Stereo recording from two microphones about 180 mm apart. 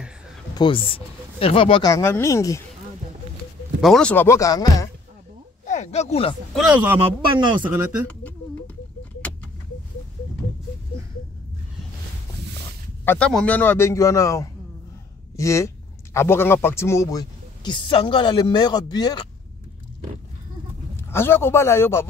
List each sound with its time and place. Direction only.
0.6 s speech: 30° left (ahead or behind)
3.8 s speech: 5° left (ahead or behind); by 4.8 s 20° left (ahead or behind)
5.7 s speech: 40° left (ahead or behind)
6.5 s speech: 10° right (ahead or behind)
7.0 s speech: 25° right (ahead or behind)
13.0 s speech: 10° left (ahead or behind)
20.9 s a man's voice: 15° left (ahead or behind)